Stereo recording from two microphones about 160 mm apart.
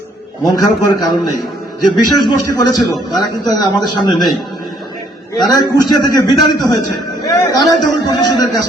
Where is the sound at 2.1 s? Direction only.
25° left (ahead or behind).